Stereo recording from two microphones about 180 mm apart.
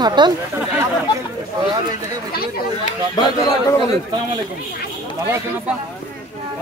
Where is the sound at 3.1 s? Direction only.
20° left (ahead or behind).